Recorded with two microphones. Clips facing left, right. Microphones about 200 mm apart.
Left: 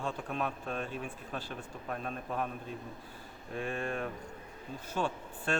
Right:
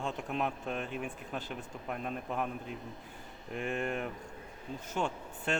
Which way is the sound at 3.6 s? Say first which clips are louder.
Right 1 dB; 20° right (ahead or behind).